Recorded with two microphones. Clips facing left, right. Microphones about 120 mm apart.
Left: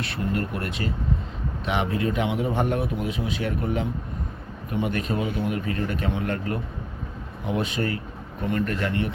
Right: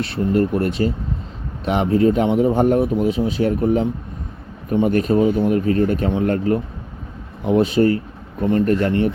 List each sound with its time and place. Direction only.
0.0 s a man's voice: 35° right (ahead or behind)